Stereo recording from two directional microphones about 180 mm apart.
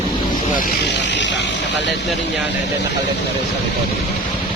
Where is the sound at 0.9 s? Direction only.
75° left (ahead or behind).